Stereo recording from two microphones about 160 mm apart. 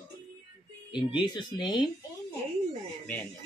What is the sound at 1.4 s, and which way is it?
Speech, 30° left (ahead or behind).